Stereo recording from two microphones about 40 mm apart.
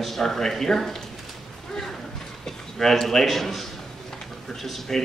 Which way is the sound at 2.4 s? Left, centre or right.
Centre.